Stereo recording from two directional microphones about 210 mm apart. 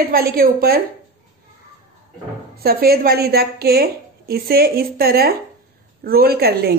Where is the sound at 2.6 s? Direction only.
45° right (ahead or behind).